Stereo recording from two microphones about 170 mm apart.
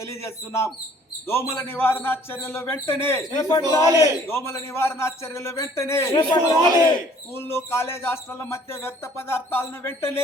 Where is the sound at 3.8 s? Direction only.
20° right (ahead or behind).